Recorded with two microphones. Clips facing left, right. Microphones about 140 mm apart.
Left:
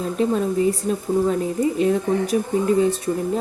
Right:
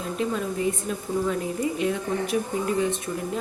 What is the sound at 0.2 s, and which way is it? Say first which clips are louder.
A woman's voice: left 7 dB; 35° left (ahead or behind).